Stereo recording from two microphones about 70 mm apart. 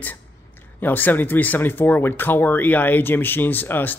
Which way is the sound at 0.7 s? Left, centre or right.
Left.